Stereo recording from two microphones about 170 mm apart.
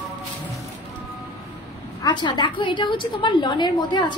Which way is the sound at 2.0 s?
25° left (ahead or behind).